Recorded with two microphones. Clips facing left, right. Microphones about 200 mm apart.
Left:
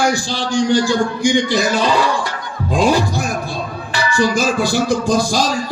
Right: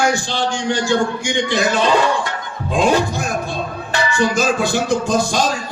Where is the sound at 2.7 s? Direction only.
35° left (ahead or behind).